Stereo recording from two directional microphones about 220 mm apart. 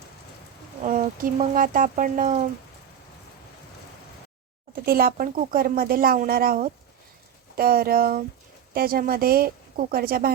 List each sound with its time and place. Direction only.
0.9 s speech: 35° right (ahead or behind)
4.7 s speech: 40° right (ahead or behind)